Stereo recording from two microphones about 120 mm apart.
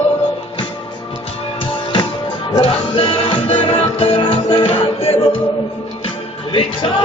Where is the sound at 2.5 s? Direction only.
50° left (ahead or behind).